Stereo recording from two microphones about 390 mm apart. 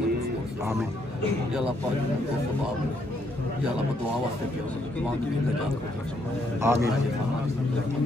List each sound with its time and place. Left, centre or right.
6.6 s a man's voice: centre